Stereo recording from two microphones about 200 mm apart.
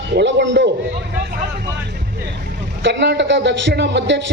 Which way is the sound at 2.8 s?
60° right (ahead or behind).